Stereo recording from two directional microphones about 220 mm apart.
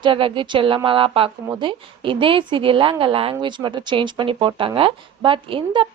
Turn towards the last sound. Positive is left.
turn(degrees=-25)  # may be behind; listen again after turning